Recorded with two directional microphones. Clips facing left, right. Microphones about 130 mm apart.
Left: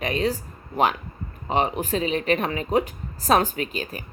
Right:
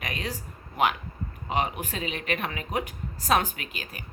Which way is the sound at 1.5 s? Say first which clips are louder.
Left 6 dB; 35° left (ahead or behind).